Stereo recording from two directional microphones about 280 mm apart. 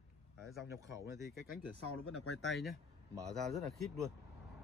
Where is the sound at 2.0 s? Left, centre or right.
Left.